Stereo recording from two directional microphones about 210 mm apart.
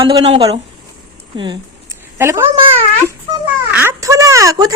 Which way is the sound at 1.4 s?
20° right (ahead or behind).